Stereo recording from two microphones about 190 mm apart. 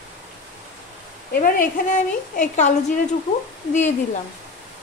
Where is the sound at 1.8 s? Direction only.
40° left (ahead or behind).